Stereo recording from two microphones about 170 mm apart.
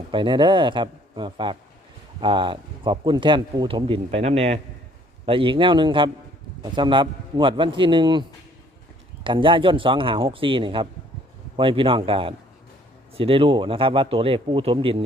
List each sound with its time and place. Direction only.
0.1 s speech: 30° right (ahead or behind)
9.2 s speech: 30° right (ahead or behind)